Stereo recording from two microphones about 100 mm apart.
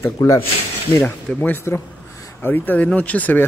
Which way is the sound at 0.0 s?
30° left (ahead or behind).